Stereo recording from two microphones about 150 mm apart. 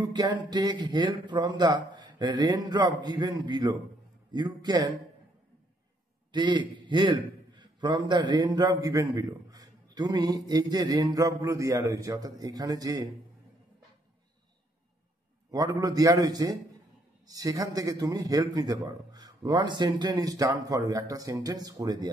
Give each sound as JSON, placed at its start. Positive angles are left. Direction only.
{"t": 0.1, "sound": "a man's voice", "side_deg": -30}
{"t": 6.3, "sound": "a man's voice", "side_deg": -30}
{"t": 15.5, "sound": "a man's voice", "side_deg": -25}